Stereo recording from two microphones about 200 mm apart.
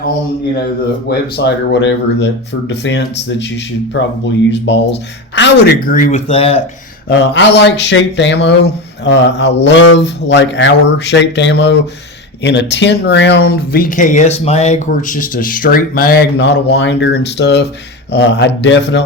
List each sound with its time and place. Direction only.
1.1 s speech: 60° left (ahead or behind); by 6.6 s 30° left (ahead or behind)
7.1 s speech: 60° left (ahead or behind)